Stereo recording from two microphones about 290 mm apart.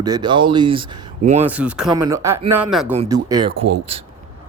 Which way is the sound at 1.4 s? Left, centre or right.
Centre.